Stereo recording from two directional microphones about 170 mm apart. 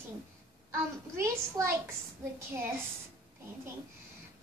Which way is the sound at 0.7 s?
15° right (ahead or behind).